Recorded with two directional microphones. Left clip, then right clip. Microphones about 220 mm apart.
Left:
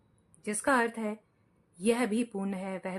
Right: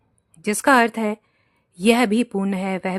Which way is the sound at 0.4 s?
45° right (ahead or behind).